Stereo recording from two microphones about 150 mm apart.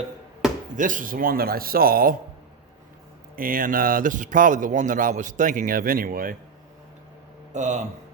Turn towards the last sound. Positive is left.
turn(degrees=-55)  # may be behind; listen again after turning